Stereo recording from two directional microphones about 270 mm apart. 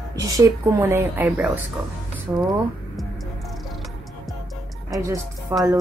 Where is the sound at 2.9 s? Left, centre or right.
Centre.